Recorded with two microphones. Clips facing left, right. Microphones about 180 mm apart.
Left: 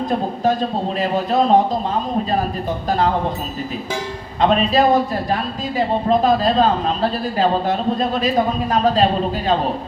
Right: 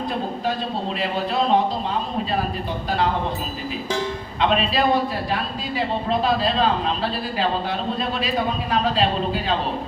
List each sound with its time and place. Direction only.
0.9 s speech: 45° left (ahead or behind)
4.4 s speech: 45° left (ahead or behind)